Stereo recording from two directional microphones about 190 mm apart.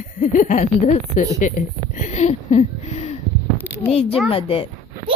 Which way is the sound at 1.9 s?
40° left (ahead or behind).